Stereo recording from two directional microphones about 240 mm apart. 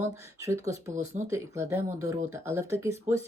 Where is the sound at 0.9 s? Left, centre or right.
Right.